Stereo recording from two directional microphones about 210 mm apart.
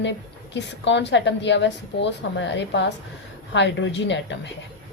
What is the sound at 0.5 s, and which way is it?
A woman's voice, 55° left (ahead or behind).